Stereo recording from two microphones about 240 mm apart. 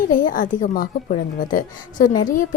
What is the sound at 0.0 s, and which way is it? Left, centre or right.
A woman's voice, left.